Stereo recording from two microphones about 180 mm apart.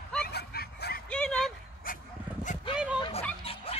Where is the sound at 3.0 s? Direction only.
35° left (ahead or behind).